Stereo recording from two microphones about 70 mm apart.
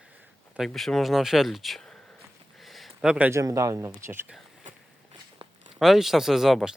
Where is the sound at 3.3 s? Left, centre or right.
Right.